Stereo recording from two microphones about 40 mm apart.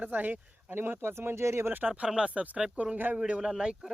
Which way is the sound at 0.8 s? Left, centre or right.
Right.